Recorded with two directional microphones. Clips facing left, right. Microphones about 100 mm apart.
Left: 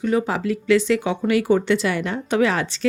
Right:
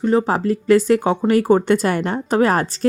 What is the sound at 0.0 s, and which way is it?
A woman's voice, 35° right (ahead or behind).